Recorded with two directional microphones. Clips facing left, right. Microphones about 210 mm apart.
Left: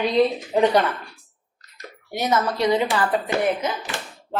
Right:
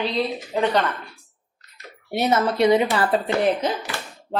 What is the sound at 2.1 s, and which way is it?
A woman's voice, 30° right (ahead or behind).